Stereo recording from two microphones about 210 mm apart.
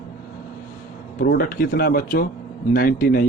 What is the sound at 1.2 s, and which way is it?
Speech, 45° left (ahead or behind).